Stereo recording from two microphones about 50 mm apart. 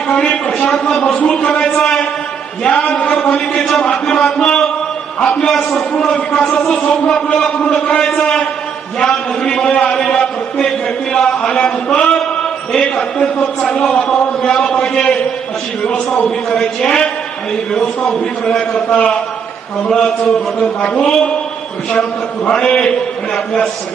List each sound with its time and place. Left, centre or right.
0.1 s a man's voice: left
1.2 s a man's voice: left
2.9 s a man's voice: left
3.5 s a man's voice: centre
5.5 s a man's voice: centre
6.0 s a man's voice: left
6.8 s a man's voice: left; by 9.8 s centre
9.9 s a sound: centre
12.8 s a man's voice: centre
18.7 s a man's voice: left
19.9 s a man's voice: centre
22.4 s a man's voice: centre